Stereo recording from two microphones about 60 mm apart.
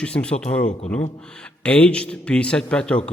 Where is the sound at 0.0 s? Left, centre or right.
Centre.